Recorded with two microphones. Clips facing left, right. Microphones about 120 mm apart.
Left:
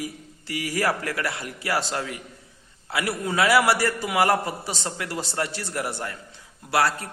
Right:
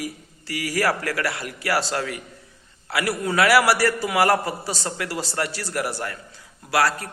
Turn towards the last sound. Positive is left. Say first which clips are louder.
# right 1 dB
turn(degrees=20)  # may be behind; listen again after turning